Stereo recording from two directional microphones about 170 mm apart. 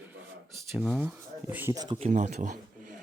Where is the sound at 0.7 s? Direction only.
Centre (ahead or behind).